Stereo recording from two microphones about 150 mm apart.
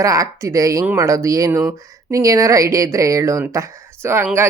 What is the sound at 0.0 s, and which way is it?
Speech, 20° right (ahead or behind).